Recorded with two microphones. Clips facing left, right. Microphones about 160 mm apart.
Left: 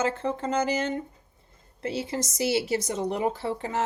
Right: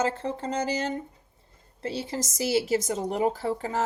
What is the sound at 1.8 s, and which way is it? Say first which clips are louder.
Speech: left 1 dB; 35° right (ahead or behind).